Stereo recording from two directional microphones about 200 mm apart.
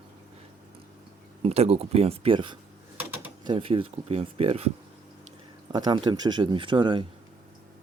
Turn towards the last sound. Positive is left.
turn(degrees=-25)  # may be behind; listen again after turning